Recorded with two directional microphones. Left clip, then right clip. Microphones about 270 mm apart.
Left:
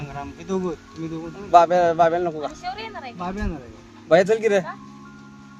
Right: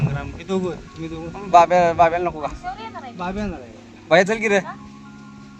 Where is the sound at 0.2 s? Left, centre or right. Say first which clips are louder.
Left 1 dB; centre.